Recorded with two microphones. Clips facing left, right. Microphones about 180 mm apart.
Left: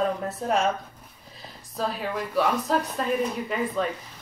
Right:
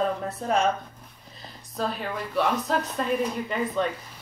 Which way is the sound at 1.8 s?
Centre (ahead or behind).